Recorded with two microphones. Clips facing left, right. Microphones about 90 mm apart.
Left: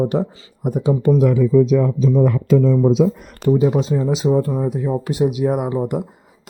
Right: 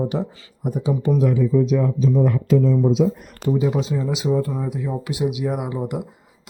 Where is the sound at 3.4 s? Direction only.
45° left (ahead or behind).